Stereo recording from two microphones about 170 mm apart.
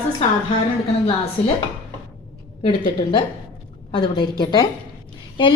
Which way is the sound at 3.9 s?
30° left (ahead or behind).